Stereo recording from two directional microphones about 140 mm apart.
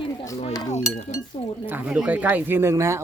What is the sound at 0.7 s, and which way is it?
Speech, 55° left (ahead or behind).